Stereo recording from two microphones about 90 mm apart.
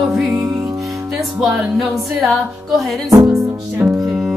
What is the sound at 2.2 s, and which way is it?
Music, centre (ahead or behind).